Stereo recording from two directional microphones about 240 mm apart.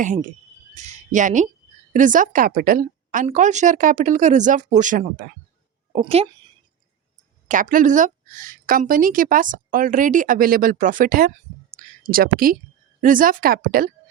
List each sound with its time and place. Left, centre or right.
0.0 s a woman's voice: right
5.9 s a woman's voice: right
7.4 s a woman's voice: right
11.7 s a sound: right
13.0 s a woman's voice: right